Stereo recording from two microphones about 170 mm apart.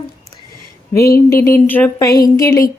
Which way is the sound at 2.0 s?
20° left (ahead or behind).